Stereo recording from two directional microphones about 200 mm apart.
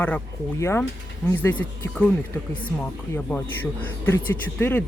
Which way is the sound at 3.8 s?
10° left (ahead or behind).